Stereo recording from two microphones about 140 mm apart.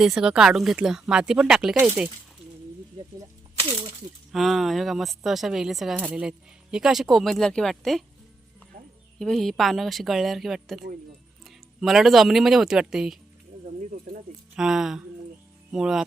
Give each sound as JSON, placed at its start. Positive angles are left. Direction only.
{"t": 0.0, "sound": "speech", "side_deg": -5}
{"t": 4.3, "sound": "speech", "side_deg": 0}
{"t": 9.1, "sound": "speech", "side_deg": 5}
{"t": 13.9, "sound": "a sound", "side_deg": -85}
{"t": 14.5, "sound": "speech", "side_deg": -5}